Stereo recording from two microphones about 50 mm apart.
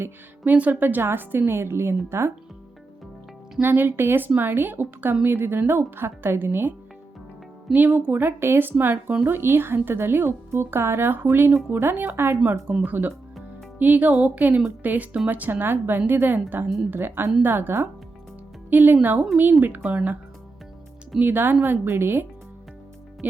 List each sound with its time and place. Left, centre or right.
0.4 s a woman's voice: right
3.6 s a woman's voice: right
7.7 s a woman's voice: right
11.1 s speech: right
12.8 s a woman's voice: right
18.7 s a woman's voice: right
21.2 s speech: right